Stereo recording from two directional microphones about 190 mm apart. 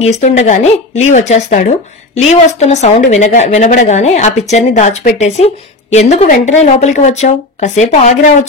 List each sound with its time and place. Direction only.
0.0 s a woman's voice: 35° left (ahead or behind)